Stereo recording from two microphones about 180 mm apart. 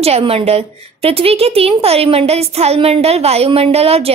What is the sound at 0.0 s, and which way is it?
A woman's voice, 35° right (ahead or behind).